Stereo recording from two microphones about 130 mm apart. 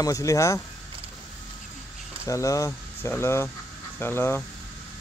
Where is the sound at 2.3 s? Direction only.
25° left (ahead or behind).